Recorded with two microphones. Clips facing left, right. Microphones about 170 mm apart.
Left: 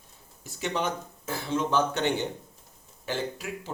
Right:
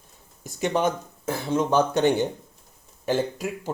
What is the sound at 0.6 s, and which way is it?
Speech, 50° right (ahead or behind).